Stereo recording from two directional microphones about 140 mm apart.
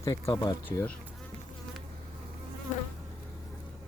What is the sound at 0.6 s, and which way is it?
Speech, 15° left (ahead or behind).